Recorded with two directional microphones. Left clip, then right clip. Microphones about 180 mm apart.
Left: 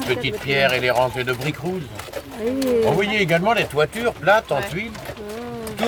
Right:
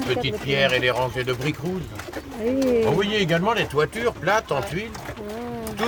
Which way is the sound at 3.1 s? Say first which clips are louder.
Left 3 dB; 15° left (ahead or behind).